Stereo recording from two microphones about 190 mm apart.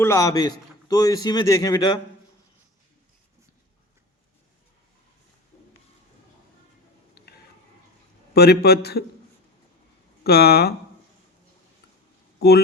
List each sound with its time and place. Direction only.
0.0 s a man's voice: 15° left (ahead or behind)
8.3 s a man's voice: 55° left (ahead or behind)
10.2 s a man's voice: 55° left (ahead or behind)
12.4 s speech: 55° left (ahead or behind)